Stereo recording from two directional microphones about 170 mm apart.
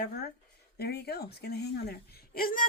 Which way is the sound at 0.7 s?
70° left (ahead or behind).